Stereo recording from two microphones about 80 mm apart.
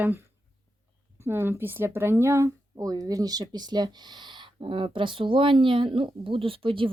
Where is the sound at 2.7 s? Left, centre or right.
Right.